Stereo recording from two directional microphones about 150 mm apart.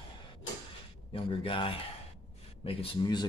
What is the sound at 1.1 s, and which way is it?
Speech, 35° left (ahead or behind).